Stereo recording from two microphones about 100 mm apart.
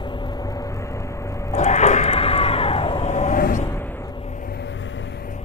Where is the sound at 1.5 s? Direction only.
90° left; by 3.1 s 75° left (ahead or behind).